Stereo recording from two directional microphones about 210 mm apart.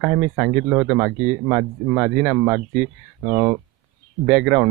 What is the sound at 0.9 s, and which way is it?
Speech, 10° right (ahead or behind).